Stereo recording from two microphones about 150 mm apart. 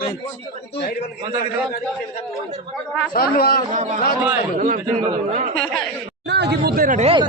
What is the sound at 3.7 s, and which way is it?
A man's voice, 55° right (ahead or behind).